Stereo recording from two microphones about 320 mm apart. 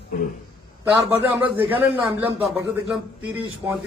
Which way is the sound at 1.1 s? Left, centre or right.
Centre.